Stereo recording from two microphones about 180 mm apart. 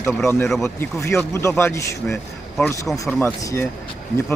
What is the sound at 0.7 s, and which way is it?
A man's voice, 15° left (ahead or behind).